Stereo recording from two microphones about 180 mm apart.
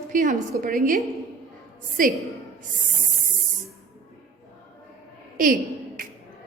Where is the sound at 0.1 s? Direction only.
45° right (ahead or behind).